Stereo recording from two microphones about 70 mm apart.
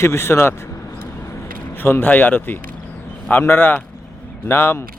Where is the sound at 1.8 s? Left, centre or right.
Left.